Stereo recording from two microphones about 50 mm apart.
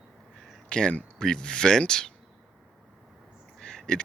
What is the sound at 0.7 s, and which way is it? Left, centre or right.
Speech, centre.